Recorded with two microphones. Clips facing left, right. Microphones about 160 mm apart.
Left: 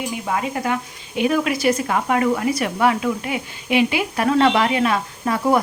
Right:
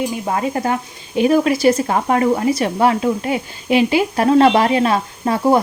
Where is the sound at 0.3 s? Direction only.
35° right (ahead or behind).